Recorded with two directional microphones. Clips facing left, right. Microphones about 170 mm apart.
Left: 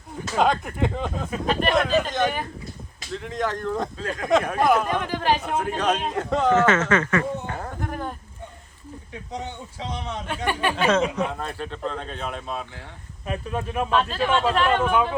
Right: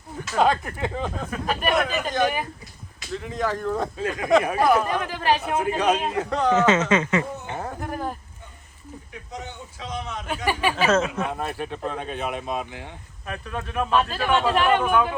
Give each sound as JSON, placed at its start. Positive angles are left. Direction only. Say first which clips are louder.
{"t": 0.3, "sound": "speech", "louder": "even", "side_deg": 0}
{"t": 6.5, "sound": "speech", "louder": "right 1 dB", "side_deg": -20}
{"t": 7.6, "sound": "a sound", "louder": "right 1 dB", "side_deg": -5}
{"t": 9.8, "sound": "a man's voice", "louder": "left 1 dB", "side_deg": 30}
{"t": 10.2, "sound": "speech", "louder": "right 1 dB", "side_deg": -5}
{"t": 13.2, "sound": "speech", "louder": "left 4 dB", "side_deg": 15}
{"t": 13.9, "sound": "speech", "louder": "right 1 dB", "side_deg": -10}